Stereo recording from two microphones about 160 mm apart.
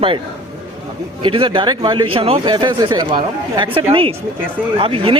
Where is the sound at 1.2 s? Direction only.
30° right (ahead or behind).